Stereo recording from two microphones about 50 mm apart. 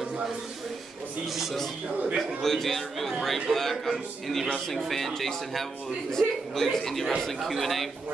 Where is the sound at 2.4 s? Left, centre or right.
Centre.